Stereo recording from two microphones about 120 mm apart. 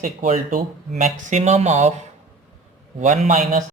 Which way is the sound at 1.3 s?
70° right (ahead or behind).